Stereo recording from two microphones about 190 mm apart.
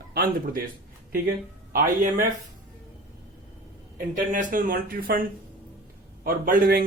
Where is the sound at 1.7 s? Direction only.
45° right (ahead or behind).